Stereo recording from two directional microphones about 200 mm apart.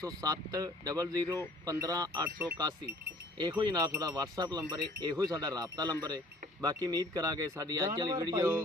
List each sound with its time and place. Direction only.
0.0 s speech: 20° right (ahead or behind)